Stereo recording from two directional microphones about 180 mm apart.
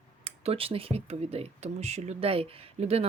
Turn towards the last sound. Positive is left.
turn(degrees=-35)  # may be behind; listen again after turning